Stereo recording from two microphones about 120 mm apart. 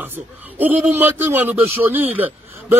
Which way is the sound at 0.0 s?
15° right (ahead or behind).